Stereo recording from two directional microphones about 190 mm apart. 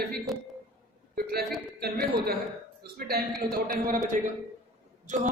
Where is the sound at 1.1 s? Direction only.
55° right (ahead or behind).